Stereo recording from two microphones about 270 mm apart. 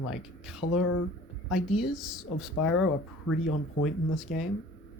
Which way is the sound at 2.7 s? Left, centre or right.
Left.